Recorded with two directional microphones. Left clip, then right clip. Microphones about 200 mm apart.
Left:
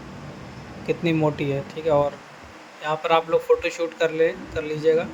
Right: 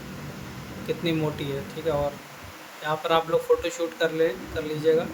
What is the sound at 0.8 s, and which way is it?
A man's voice, 30° left (ahead or behind).